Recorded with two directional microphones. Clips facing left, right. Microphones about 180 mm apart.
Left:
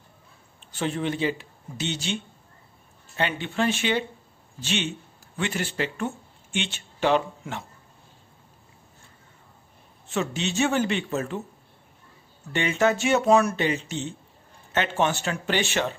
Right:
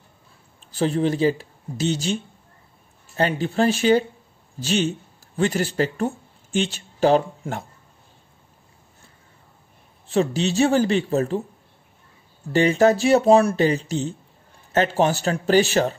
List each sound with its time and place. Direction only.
0.6 s speech: 35° right (ahead or behind)
3.2 s speech: 40° right (ahead or behind)
10.0 s speech: 35° right (ahead or behind)
12.5 s speech: 35° right (ahead or behind)